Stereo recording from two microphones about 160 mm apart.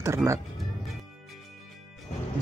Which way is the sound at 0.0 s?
15° right (ahead or behind).